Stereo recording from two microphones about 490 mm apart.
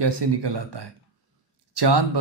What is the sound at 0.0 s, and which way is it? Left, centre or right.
A man's voice, right.